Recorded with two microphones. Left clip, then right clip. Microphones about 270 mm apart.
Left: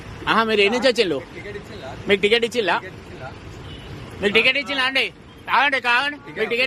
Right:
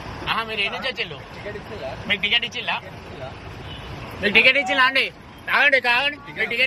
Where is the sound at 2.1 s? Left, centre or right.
Left.